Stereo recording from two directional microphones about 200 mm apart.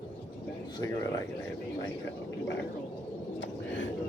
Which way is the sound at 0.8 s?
15° left (ahead or behind).